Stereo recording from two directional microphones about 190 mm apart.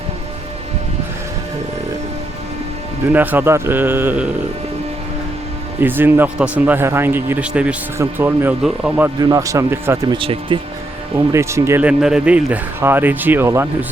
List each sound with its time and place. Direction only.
3.1 s speech: 10° right (ahead or behind)
5.8 s speech: 10° right (ahead or behind)
9.1 s speech: 20° right (ahead or behind)
10.2 s speech: 25° right (ahead or behind)
11.3 s speech: 15° right (ahead or behind)